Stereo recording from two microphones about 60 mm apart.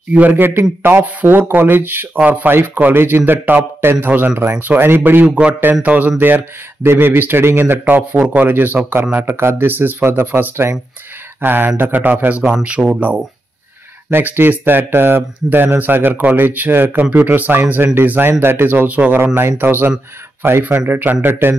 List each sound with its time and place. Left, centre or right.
0.3 s a man's voice: right
5.2 s a man's voice: right
6.2 s a man's voice: right
14.1 s speech: right
19.1 s speech: right